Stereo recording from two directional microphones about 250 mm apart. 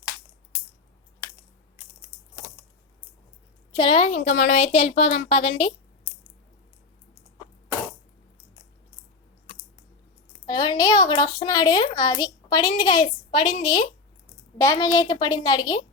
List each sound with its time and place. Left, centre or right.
3.7 s speech: centre
10.4 s a woman's voice: centre